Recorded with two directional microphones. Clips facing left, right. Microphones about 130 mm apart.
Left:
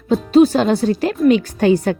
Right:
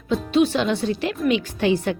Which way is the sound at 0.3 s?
40° left (ahead or behind).